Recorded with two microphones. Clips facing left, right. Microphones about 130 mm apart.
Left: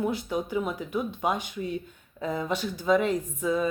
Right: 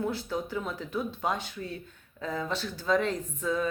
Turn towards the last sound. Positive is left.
turn(degrees=10)  # may be behind; listen again after turning